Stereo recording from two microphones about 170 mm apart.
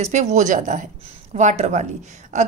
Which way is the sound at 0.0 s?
45° right (ahead or behind).